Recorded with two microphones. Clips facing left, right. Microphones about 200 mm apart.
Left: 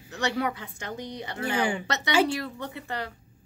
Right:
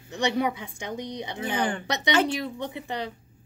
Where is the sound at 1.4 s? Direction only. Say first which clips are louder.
Left 1 dB; 10° left (ahead or behind).